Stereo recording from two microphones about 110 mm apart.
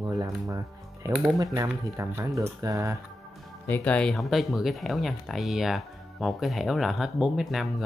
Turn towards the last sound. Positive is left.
turn(degrees=0)  # may be behind; listen again after turning